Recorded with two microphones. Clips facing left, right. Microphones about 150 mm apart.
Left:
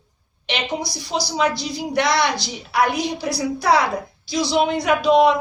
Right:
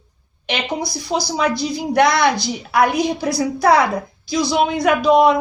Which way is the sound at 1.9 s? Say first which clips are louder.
Right 4 dB; 50° right (ahead or behind).